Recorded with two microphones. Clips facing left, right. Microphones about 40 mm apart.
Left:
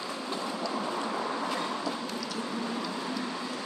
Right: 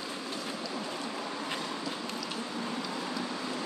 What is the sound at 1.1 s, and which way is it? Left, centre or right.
Vehicle, left.